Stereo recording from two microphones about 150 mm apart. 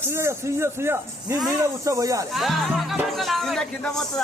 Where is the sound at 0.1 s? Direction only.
15° right (ahead or behind).